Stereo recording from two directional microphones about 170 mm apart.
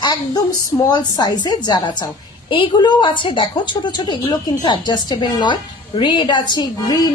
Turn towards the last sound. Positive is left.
turn(degrees=25)  # may be behind; listen again after turning